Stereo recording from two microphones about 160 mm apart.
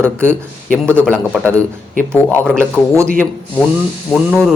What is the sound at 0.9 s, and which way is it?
A man's voice, 10° left (ahead or behind).